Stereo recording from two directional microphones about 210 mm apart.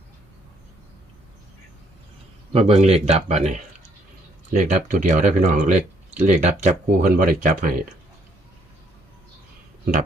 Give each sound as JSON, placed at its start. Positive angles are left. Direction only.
{"t": 2.5, "sound": "speech", "side_deg": -30}
{"t": 4.5, "sound": "speech", "side_deg": -35}